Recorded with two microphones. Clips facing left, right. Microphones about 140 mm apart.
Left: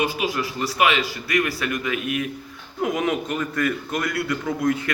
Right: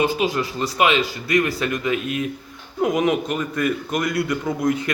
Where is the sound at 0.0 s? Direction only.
25° right (ahead or behind).